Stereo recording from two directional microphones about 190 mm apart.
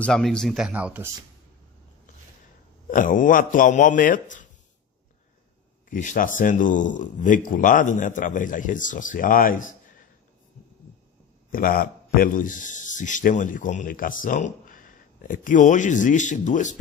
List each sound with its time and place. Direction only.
0.0 s speech: 5° left (ahead or behind)
2.9 s a man's voice: 45° left (ahead or behind)
5.9 s a man's voice: 45° left (ahead or behind)
11.5 s a man's voice: 45° left (ahead or behind)